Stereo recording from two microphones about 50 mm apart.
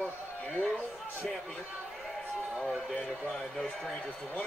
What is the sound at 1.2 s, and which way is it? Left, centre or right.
Speech, centre.